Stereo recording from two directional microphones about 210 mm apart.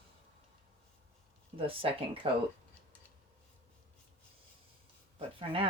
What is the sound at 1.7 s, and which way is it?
Speech, 25° right (ahead or behind).